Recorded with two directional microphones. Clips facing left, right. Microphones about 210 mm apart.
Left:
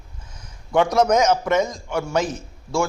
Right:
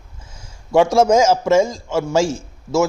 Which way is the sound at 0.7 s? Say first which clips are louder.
Right 4 dB; 25° right (ahead or behind).